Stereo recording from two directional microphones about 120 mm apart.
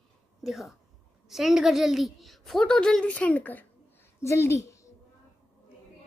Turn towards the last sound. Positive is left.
turn(degrees=25)  # may be behind; listen again after turning